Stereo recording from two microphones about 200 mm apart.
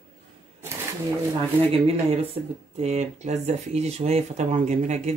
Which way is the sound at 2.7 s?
35° right (ahead or behind).